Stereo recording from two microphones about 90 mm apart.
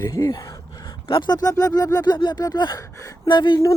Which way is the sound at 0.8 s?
60° left (ahead or behind).